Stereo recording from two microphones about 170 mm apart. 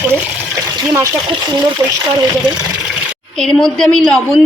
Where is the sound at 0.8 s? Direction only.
20° right (ahead or behind).